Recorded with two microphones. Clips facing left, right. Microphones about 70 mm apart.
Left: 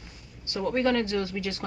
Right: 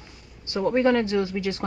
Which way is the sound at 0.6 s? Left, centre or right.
Centre.